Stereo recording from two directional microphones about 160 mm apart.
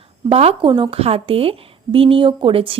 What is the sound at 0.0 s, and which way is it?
A woman's voice, 40° right (ahead or behind).